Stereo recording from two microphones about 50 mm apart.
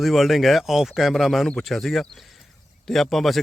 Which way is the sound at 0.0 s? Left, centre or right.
Centre.